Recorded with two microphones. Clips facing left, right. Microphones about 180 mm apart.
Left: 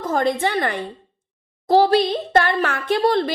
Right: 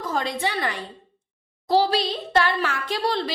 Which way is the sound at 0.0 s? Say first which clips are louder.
Left 6 dB; 50° left (ahead or behind).